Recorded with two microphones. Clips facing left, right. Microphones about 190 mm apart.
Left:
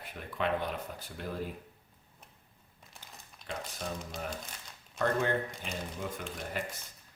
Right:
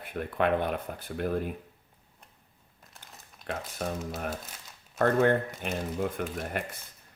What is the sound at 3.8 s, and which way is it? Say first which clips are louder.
Speech: right 7 dB; 55° right (ahead or behind).